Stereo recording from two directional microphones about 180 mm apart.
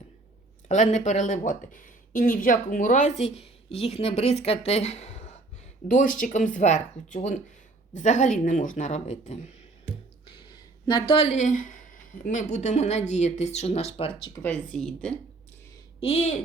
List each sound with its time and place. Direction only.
0.7 s speech: 40° left (ahead or behind)
10.2 s speech: 25° left (ahead or behind)
14.3 s speech: 10° left (ahead or behind)
16.0 s speech: 35° left (ahead or behind)